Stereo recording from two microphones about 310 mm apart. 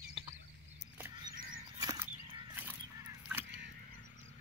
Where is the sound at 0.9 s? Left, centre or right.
Centre.